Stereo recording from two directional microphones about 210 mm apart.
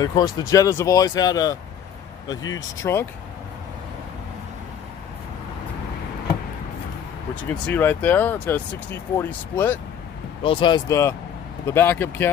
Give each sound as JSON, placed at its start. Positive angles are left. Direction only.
{"t": 0.0, "sound": "speech", "side_deg": 20}
{"t": 2.8, "sound": "speech", "side_deg": 10}
{"t": 7.6, "sound": "speech", "side_deg": 10}
{"t": 10.4, "sound": "speech", "side_deg": 25}